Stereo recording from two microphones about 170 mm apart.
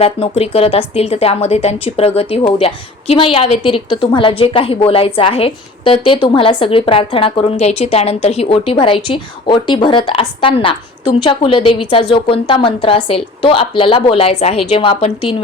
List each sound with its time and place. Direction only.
0.0 s a woman's voice: 35° left (ahead or behind)